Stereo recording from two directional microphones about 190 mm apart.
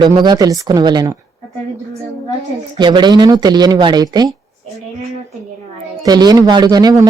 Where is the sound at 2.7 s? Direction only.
25° right (ahead or behind).